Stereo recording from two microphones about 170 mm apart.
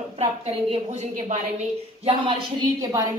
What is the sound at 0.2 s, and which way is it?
A woman's voice, 40° right (ahead or behind).